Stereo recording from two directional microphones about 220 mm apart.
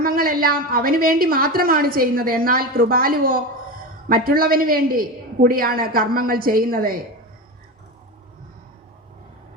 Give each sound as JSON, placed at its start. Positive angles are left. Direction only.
{"t": 0.0, "sound": "a woman's voice", "side_deg": -40}